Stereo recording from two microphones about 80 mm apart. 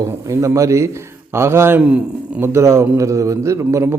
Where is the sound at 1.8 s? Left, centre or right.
Centre.